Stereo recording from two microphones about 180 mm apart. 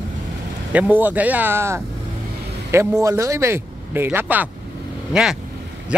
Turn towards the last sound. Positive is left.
turn(degrees=-5)  # may be behind; listen again after turning